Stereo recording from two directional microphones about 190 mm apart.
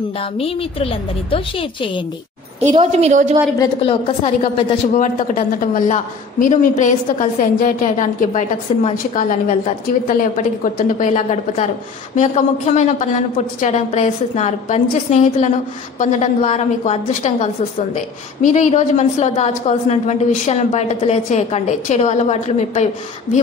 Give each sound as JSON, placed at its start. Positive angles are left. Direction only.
{"t": 0.2, "sound": "a woman's voice", "side_deg": 30}
{"t": 2.6, "sound": "a woman's voice", "side_deg": -35}
{"t": 3.8, "sound": "a woman's voice", "side_deg": 30}
{"t": 4.9, "sound": "a woman's voice", "side_deg": 45}